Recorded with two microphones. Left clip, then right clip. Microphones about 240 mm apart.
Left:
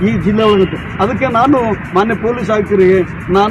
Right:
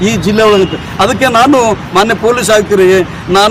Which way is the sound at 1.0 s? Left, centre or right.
Right.